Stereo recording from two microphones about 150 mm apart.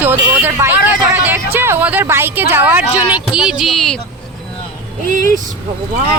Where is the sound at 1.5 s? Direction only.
15° right (ahead or behind); by 3.9 s centre (ahead or behind).